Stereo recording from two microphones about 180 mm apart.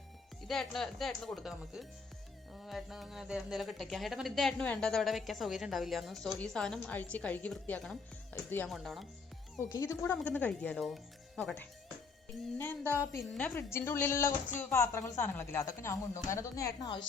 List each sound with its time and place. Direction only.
0.4 s speech: centre (ahead or behind)
9.6 s speech: 15° left (ahead or behind)
12.8 s a woman's voice: 10° right (ahead or behind)
13.3 s speech: 10° left (ahead or behind)